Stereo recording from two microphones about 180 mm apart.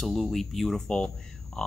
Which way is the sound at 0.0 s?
Centre (ahead or behind).